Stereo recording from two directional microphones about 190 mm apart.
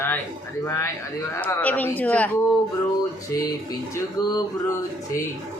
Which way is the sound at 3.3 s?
20° left (ahead or behind).